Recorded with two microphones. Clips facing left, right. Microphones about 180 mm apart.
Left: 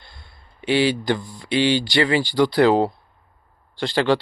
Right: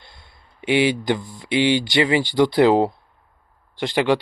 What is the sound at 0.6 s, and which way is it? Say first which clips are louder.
Speech: right 1 dB; 20° right (ahead or behind).